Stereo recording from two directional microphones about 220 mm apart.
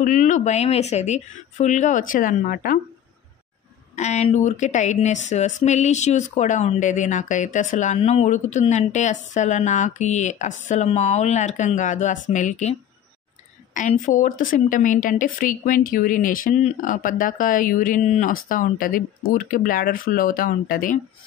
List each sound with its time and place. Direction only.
0.0 s a woman's voice: 35° left (ahead or behind)
3.9 s a woman's voice: 30° left (ahead or behind)
13.7 s a woman's voice: 35° left (ahead or behind)